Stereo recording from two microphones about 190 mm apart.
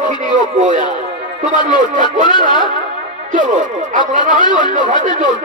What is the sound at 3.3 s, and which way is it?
Speech, 40° right (ahead or behind).